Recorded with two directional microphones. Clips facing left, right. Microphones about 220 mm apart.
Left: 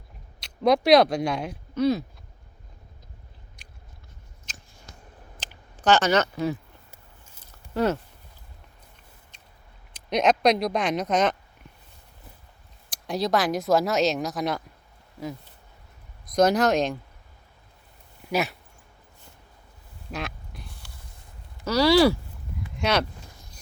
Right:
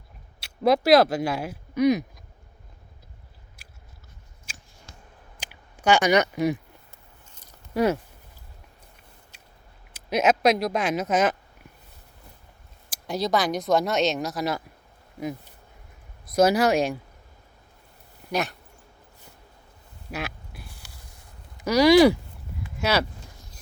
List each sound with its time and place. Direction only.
0.3 s speech: 5° right (ahead or behind)
4.5 s a sound: 10° right (ahead or behind)
5.4 s clicking: 10° right (ahead or behind)
7.7 s speech: 10° right (ahead or behind)
9.9 s speech: 5° right (ahead or behind)
12.9 s speech: centre (ahead or behind)
16.3 s speech: 5° right (ahead or behind)
18.3 s speech: 5° left (ahead or behind)
20.1 s a sound: 5° right (ahead or behind)
21.6 s speech: 15° right (ahead or behind)
22.8 s speech: 5° right (ahead or behind)